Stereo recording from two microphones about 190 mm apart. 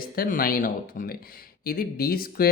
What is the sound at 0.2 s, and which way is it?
Speech, 50° left (ahead or behind).